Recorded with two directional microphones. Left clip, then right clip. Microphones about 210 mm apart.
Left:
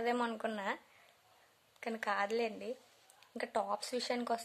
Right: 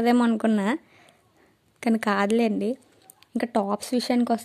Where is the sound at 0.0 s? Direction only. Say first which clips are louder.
Right 13 dB; 40° right (ahead or behind).